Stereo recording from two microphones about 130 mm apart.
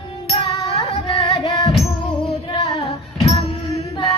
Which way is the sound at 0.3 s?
45° left (ahead or behind).